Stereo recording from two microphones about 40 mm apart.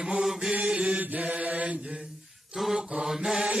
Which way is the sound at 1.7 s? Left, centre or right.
Right.